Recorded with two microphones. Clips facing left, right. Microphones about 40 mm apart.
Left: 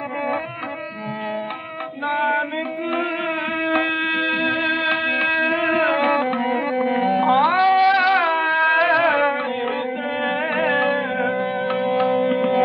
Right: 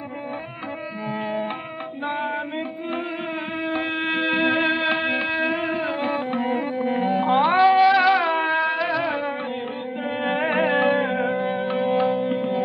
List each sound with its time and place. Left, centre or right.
2.0 s music: left
3.6 s a sound: left
4.1 s music: centre
5.2 s music: centre
5.7 s music: left
6.4 s music: centre
7.4 s music: centre
8.2 s a sound: centre
8.6 s music: left
10.2 s music: centre
12.2 s music: left